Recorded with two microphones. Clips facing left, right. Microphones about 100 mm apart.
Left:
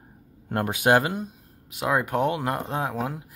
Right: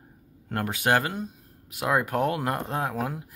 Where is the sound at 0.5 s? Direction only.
20° left (ahead or behind).